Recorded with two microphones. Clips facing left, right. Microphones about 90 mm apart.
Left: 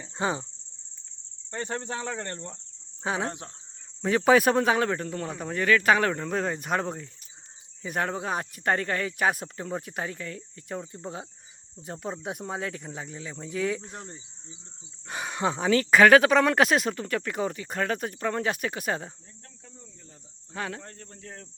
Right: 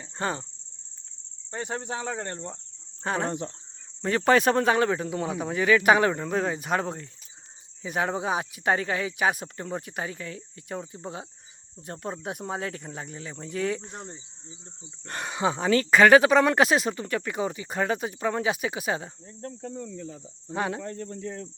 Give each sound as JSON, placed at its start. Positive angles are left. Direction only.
{"t": 0.0, "sound": "cricket", "side_deg": 10}
{"t": 1.5, "sound": "cricket", "side_deg": -10}
{"t": 3.0, "sound": "cricket", "side_deg": 5}
{"t": 4.0, "sound": "speech", "side_deg": 0}
{"t": 19.4, "sound": "cricket", "side_deg": -45}
{"t": 19.7, "sound": "cricket", "side_deg": -80}
{"t": 20.5, "sound": "cricket", "side_deg": -20}